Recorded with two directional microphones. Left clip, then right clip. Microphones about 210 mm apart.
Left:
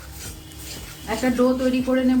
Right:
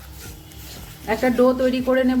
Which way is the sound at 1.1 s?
35° right (ahead or behind).